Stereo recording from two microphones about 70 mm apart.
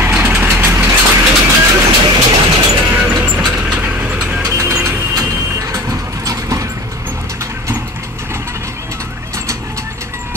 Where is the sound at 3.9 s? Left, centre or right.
Centre.